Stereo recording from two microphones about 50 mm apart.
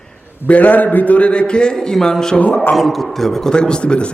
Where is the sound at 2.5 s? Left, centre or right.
Left.